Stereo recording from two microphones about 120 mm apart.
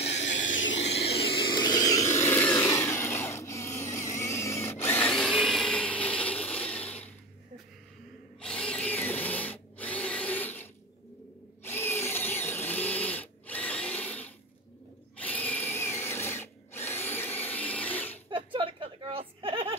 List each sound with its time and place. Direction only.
0.0 s vehicle: 65° left (ahead or behind)
0.7 s vehicle: 55° left (ahead or behind); by 5.3 s 10° left (ahead or behind)
5.3 s blender: centre (ahead or behind)
8.4 s tools: 10° left (ahead or behind)
11.6 s drill: 20° left (ahead or behind)
15.1 s tools: 15° left (ahead or behind)
18.3 s a sound: 45° right (ahead or behind)